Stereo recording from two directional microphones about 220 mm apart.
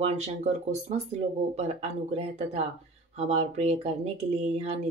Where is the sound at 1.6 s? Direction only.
30° right (ahead or behind).